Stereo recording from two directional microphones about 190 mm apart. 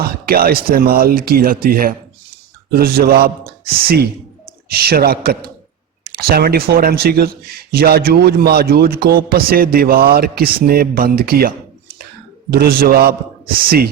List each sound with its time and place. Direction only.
0.0 s speech: 50° right (ahead or behind)